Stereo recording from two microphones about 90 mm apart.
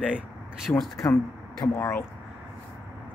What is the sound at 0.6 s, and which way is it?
Speech, centre (ahead or behind).